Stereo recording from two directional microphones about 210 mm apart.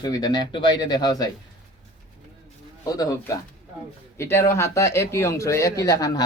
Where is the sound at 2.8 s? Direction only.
15° left (ahead or behind).